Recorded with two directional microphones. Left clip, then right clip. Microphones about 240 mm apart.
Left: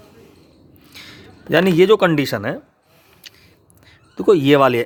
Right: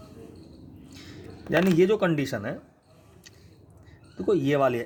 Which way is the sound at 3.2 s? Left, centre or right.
Left.